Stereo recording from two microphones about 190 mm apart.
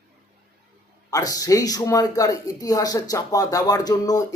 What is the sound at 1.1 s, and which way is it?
Speech, 20° left (ahead or behind).